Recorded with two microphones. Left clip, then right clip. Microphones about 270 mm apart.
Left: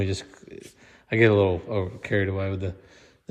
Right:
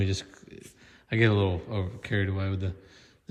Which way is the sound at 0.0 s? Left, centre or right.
Centre.